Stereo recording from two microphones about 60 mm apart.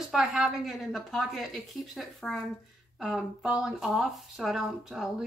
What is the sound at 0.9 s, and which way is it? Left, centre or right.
Speech, centre.